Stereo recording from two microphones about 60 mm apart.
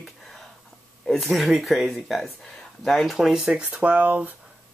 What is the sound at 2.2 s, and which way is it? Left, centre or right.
Speech, centre.